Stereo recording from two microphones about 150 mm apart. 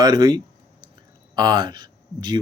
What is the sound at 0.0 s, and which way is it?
Speech, 30° right (ahead or behind).